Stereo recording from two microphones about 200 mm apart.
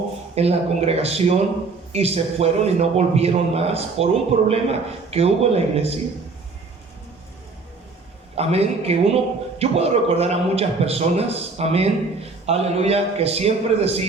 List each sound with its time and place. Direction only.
0.3 s a man's voice: 30° right (ahead or behind)
8.4 s a man's voice: 30° right (ahead or behind)